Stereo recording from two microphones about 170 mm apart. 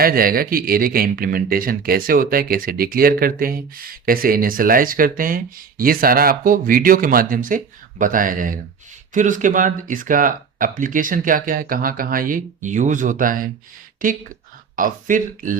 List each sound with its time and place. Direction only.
0.0 s speech: 60° right (ahead or behind)